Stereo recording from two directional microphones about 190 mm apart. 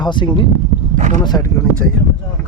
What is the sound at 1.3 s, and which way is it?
Speech, 20° left (ahead or behind).